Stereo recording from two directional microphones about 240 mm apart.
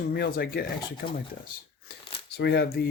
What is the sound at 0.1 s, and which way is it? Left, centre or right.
Speech, left.